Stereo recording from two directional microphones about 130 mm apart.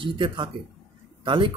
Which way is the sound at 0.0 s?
40° right (ahead or behind).